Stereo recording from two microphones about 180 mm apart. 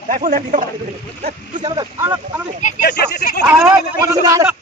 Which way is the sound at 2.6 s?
50° left (ahead or behind).